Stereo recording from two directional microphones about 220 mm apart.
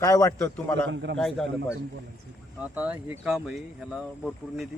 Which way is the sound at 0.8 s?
55° right (ahead or behind).